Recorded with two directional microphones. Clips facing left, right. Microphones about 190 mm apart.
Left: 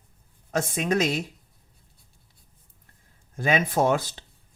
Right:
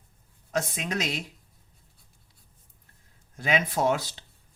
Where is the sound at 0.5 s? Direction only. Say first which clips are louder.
Left 5 dB; 50° left (ahead or behind).